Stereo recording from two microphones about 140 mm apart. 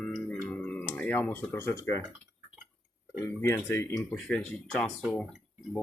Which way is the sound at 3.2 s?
15° left (ahead or behind).